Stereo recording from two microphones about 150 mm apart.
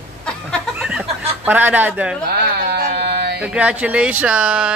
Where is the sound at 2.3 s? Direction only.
90° right.